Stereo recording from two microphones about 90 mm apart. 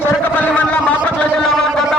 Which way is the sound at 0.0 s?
20° left (ahead or behind).